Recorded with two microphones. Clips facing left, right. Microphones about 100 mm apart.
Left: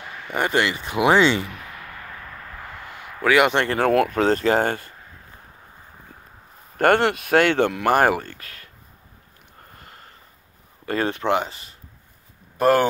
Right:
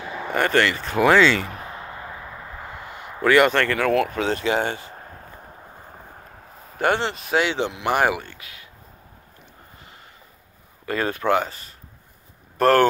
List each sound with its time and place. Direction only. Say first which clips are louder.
0.3 s speech: right 2 dB; 15° left (ahead or behind)
1.4 s a sound: right 2 dB; 35° right (ahead or behind); by 3.3 s 5° right (ahead or behind)
3.3 s speech: right 1 dB; 10° left (ahead or behind)
3.7 s speech: left 2 dB; 45° left (ahead or behind)
4.9 s a sound: right 6 dB; 45° right (ahead or behind)
6.8 s speech: left 5 dB; 55° left (ahead or behind)
10.9 s speech: even; 30° left (ahead or behind)
12.5 s speech: right 1 dB; 10° left (ahead or behind)